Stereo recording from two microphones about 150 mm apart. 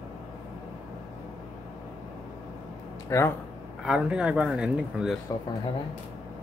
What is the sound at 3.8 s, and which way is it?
Speech, 5° right (ahead or behind).